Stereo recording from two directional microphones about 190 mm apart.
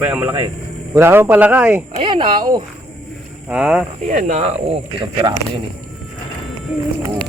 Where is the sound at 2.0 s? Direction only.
30° right (ahead or behind).